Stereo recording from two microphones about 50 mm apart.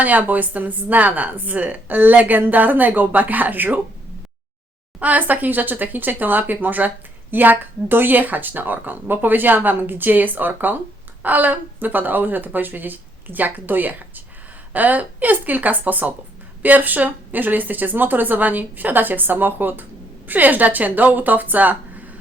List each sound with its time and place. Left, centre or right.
0.0 s speech: right
4.9 s speech: right